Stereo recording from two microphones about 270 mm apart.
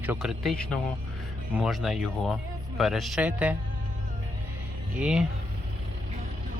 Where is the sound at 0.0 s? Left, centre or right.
Centre.